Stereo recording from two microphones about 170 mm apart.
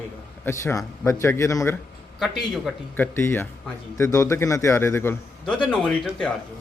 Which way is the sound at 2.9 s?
10° left (ahead or behind).